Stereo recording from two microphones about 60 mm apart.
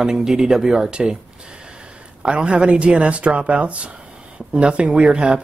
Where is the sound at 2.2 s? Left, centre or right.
Centre.